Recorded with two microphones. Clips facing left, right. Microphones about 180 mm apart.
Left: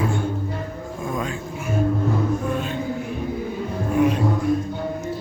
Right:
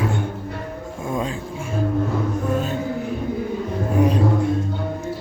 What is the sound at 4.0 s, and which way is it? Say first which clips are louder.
Music: right 1 dB; 35° right (ahead or behind).